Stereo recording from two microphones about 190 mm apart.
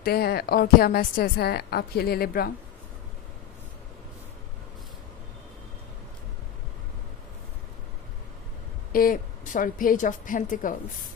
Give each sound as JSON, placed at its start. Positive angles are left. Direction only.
{"t": 0.0, "sound": "a woman's voice", "side_deg": 55}
{"t": 8.9, "sound": "a woman's voice", "side_deg": 45}